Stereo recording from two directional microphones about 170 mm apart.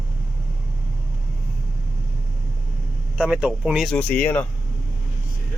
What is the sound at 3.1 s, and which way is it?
Speech, 5° right (ahead or behind).